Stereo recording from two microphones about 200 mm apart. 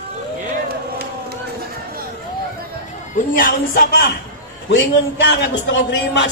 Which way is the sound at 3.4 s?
45° left (ahead or behind).